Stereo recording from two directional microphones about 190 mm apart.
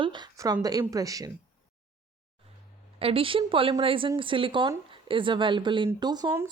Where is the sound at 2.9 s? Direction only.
30° right (ahead or behind).